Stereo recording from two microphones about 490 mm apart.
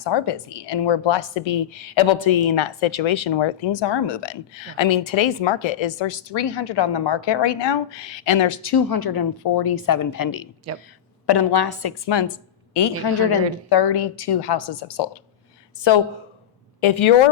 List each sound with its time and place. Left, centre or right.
0.0 s a woman's voice: left
16.8 s speech: left